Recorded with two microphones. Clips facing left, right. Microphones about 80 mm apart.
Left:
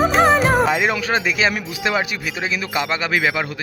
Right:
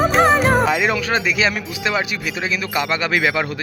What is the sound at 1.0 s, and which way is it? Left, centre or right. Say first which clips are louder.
Speech: even; left.